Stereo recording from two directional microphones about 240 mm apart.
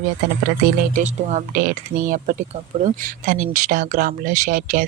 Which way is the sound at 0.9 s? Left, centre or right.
Right.